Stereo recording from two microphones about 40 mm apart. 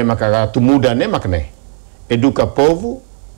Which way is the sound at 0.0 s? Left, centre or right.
Centre.